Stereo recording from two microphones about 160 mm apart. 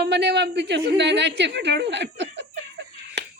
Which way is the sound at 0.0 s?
90° right.